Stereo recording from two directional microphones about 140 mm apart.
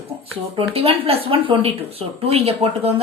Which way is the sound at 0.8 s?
45° right (ahead or behind).